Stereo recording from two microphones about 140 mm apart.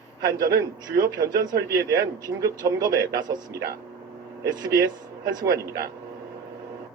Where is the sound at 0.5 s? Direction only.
25° right (ahead or behind).